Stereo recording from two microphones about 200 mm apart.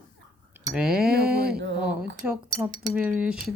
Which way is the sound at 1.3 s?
50° right (ahead or behind).